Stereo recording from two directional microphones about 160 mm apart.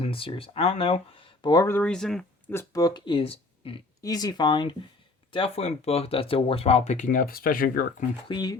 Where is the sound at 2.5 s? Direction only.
20° left (ahead or behind).